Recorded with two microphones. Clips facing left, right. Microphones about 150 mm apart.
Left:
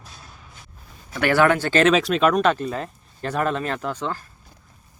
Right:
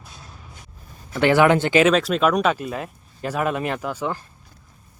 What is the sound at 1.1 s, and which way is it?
Speech, 20° right (ahead or behind).